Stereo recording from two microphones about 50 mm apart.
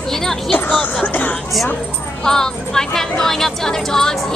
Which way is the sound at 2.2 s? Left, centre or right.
Centre.